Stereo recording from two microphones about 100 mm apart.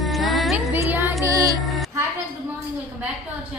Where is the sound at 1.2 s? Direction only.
35° right (ahead or behind).